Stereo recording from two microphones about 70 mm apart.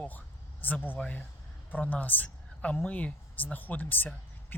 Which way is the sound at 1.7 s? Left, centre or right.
Left.